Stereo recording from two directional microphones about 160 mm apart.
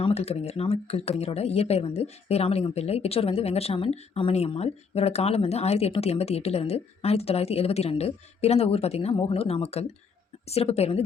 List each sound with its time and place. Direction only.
0.0 s speech: 40° left (ahead or behind)